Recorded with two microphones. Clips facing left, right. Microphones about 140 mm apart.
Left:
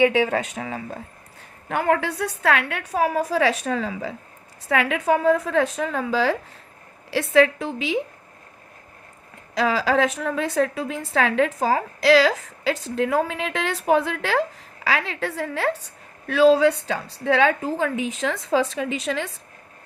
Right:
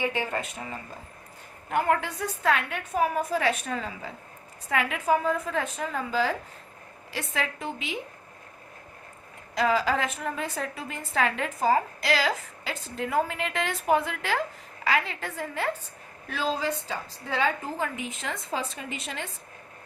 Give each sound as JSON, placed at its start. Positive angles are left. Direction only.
{"t": 0.0, "sound": "a woman's voice", "side_deg": 85}
{"t": 9.6, "sound": "a woman's voice", "side_deg": 90}
{"t": 16.3, "sound": "a woman's voice", "side_deg": 75}